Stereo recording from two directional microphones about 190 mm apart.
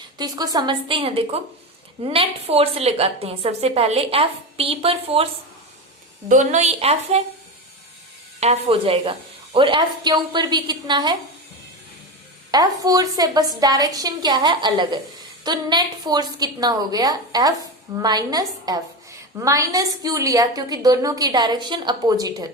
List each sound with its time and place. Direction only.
0.2 s a woman's voice: 20° right (ahead or behind)
8.4 s a woman's voice: 30° right (ahead or behind)
12.5 s a woman's voice: 20° right (ahead or behind)